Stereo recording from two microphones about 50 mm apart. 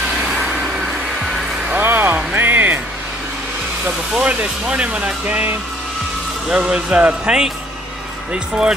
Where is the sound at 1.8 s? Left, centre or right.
Right.